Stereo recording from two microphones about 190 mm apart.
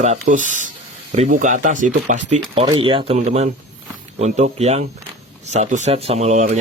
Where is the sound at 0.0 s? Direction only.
40° right (ahead or behind).